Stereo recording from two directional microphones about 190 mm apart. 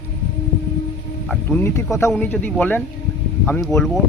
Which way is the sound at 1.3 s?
10° left (ahead or behind).